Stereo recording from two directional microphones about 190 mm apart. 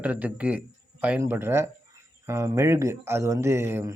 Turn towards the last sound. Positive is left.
turn(degrees=-15)  # may be behind; listen again after turning